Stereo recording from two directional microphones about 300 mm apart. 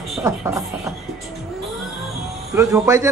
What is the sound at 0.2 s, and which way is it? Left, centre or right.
Speech, centre.